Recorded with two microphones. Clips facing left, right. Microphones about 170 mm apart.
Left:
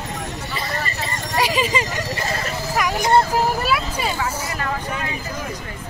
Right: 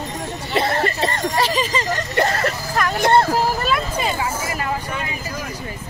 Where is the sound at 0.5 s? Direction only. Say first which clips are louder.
Right 10 dB; 70° right (ahead or behind).